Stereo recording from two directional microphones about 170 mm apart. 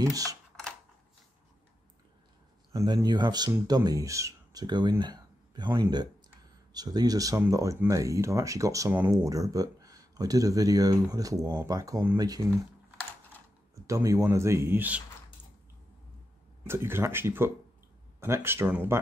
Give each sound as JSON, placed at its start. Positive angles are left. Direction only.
{"t": 0.0, "sound": "speech", "side_deg": -20}
{"t": 2.7, "sound": "speech", "side_deg": -20}
{"t": 13.8, "sound": "speech", "side_deg": -20}
{"t": 16.6, "sound": "speech", "side_deg": -15}